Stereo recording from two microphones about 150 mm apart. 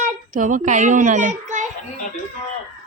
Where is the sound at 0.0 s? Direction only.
60° right (ahead or behind).